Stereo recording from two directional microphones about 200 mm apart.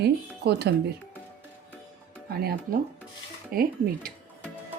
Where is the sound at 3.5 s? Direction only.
45° right (ahead or behind).